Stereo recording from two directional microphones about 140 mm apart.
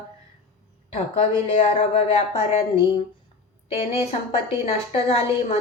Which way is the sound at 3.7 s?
45° left (ahead or behind).